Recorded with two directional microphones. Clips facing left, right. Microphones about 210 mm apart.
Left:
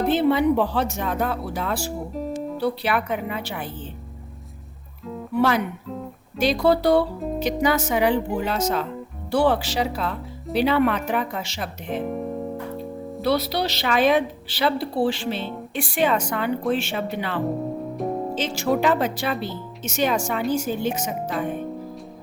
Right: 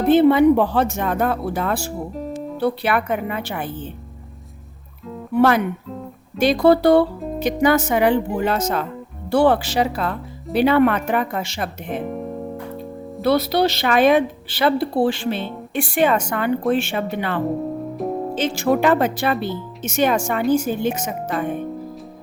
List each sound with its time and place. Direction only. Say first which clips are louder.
0.1 s a woman's voice: right 8 dB; 50° right (ahead or behind)
2.1 s guitar: even; centre (ahead or behind)
2.6 s a woman's voice: right 4 dB; 55° right (ahead or behind)
5.4 s a woman's voice: right 5 dB; 55° right (ahead or behind)
12.0 s music: even; centre (ahead or behind)
13.2 s a woman's voice: right 5 dB; 50° right (ahead or behind)
17.9 s music: right 1 dB; centre (ahead or behind)
18.3 s a woman's voice: right 5 dB; 55° right (ahead or behind)